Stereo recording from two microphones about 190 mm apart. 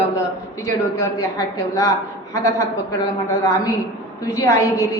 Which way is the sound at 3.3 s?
15° left (ahead or behind).